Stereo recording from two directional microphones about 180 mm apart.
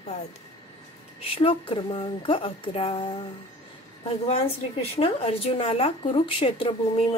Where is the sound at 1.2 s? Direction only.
30° left (ahead or behind).